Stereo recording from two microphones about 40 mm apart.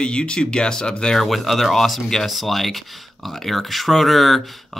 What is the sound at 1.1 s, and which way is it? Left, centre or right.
Speech, centre.